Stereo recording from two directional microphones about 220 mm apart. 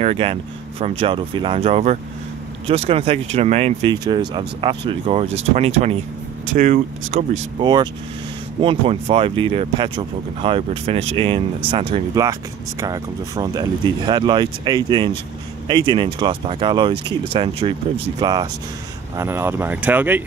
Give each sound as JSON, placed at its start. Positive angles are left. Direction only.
{"t": 0.0, "sound": "speech", "side_deg": -25}
{"t": 7.6, "sound": "speech", "side_deg": -20}